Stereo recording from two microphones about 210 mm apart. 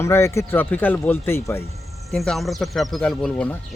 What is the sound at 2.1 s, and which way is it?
Speech, centre (ahead or behind).